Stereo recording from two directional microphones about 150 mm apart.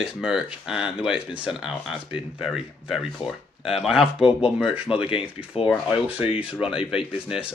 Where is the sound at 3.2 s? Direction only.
35° left (ahead or behind).